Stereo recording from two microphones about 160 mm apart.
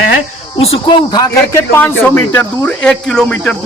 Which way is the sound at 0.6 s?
35° left (ahead or behind).